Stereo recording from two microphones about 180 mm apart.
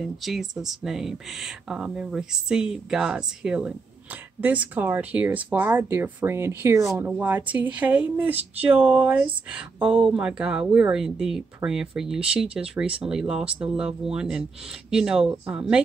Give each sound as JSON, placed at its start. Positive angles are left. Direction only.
{"t": 0.0, "sound": "speech", "side_deg": 0}
{"t": 9.8, "sound": "speech", "side_deg": -30}
{"t": 10.0, "sound": "speech", "side_deg": -5}